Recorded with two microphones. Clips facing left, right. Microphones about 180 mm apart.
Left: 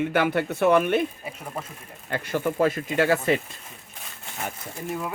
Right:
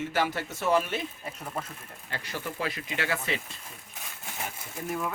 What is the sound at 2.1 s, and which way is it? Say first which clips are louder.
Speech: left 10 dB; 55° left (ahead or behind).